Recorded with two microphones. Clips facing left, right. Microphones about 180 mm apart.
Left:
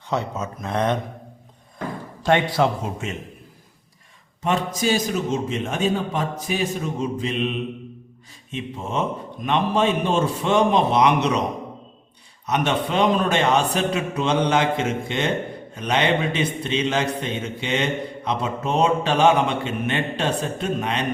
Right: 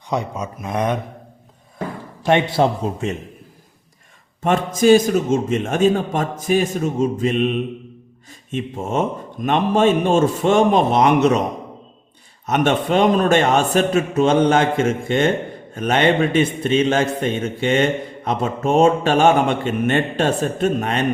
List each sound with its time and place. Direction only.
0.1 s speech: 15° right (ahead or behind)
2.2 s a man's voice: 25° right (ahead or behind)
4.4 s a man's voice: 50° right (ahead or behind)
12.5 s a man's voice: 50° right (ahead or behind)